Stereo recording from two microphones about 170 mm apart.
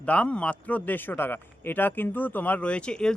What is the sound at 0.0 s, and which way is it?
A man's voice, 5° left (ahead or behind).